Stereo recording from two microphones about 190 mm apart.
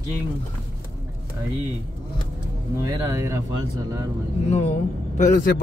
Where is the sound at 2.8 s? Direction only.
15° right (ahead or behind).